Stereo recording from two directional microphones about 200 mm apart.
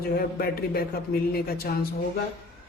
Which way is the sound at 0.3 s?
50° left (ahead or behind).